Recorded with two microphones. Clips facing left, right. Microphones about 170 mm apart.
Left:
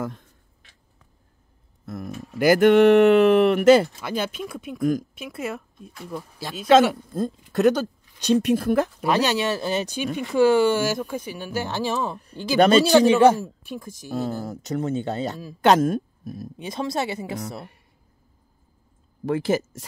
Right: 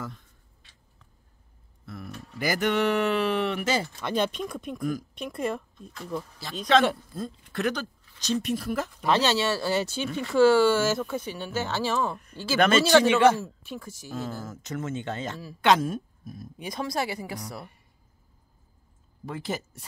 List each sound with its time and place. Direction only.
0.0 s speech: 50° left (ahead or behind)
2.3 s speech: 55° left (ahead or behind)
4.0 s speech: 5° left (ahead or behind)
6.7 s speech: 45° left (ahead or behind)
8.2 s speech: 60° left (ahead or behind)
9.0 s speech: 15° left (ahead or behind)
12.5 s speech: 35° left (ahead or behind)
13.3 s speech: 15° left (ahead or behind)
14.1 s speech: 35° left (ahead or behind)
16.5 s speech: 25° left (ahead or behind)
19.2 s speech: 90° left